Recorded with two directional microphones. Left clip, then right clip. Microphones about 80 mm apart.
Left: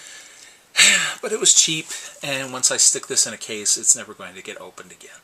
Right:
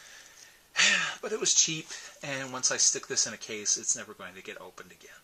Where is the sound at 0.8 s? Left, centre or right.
Left.